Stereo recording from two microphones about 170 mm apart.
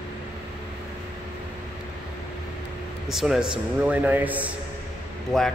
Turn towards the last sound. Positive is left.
turn(degrees=0)  # may be behind; listen again after turning